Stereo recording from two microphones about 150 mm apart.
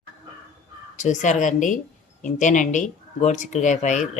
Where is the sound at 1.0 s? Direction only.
55° left (ahead or behind).